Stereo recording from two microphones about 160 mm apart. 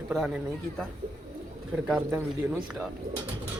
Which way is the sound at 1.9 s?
10° right (ahead or behind).